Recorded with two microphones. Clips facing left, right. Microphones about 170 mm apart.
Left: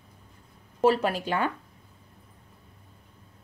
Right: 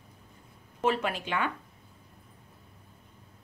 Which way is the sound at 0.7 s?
40° left (ahead or behind).